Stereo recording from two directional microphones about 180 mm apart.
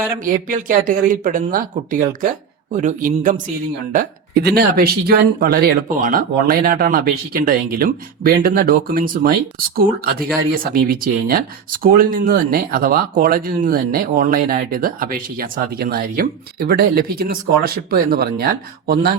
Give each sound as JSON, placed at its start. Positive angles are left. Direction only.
{"t": 0.2, "sound": "speech", "side_deg": -50}
{"t": 3.9, "sound": "speech", "side_deg": -60}